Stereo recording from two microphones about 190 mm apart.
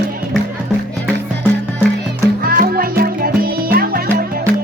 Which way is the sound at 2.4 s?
50° right (ahead or behind).